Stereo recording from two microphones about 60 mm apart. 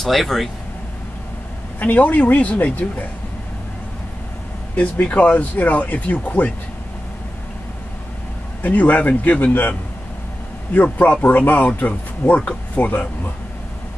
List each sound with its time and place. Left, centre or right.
0.0 s speech: centre
1.8 s speech: left
4.7 s speech: left
8.6 s speech: left